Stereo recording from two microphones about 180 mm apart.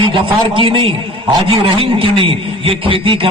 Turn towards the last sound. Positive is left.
turn(degrees=-30)  # may be behind; listen again after turning